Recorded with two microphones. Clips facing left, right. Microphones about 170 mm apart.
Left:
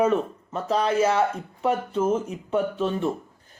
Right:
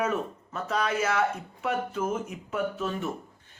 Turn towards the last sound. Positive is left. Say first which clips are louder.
# left 5 dB
turn(degrees=30)  # may be behind; listen again after turning